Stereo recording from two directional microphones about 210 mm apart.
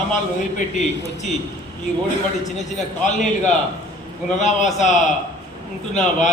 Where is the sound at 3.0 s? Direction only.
35° left (ahead or behind).